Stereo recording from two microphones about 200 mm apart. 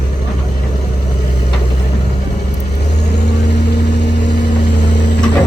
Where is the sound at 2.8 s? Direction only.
55° left (ahead or behind).